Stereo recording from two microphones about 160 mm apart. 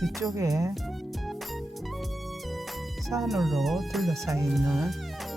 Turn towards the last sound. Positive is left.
turn(degrees=0)  # may be behind; listen again after turning